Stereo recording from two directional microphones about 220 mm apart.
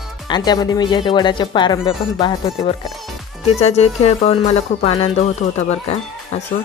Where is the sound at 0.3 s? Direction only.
20° left (ahead or behind).